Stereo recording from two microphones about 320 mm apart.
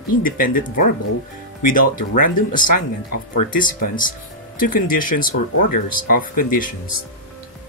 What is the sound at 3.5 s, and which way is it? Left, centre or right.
Speech, left.